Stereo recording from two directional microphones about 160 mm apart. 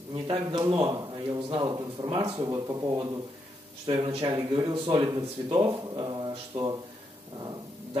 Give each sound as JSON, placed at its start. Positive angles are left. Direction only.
{"t": 0.1, "sound": "speech", "side_deg": -35}